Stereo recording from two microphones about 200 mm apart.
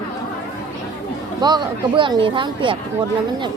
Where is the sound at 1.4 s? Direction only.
20° right (ahead or behind).